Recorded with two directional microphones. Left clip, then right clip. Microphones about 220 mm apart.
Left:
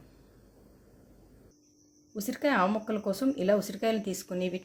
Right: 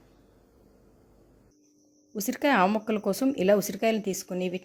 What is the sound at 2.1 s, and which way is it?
Speech, 35° right (ahead or behind).